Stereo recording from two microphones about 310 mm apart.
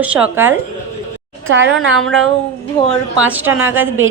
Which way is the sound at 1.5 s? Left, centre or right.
Right.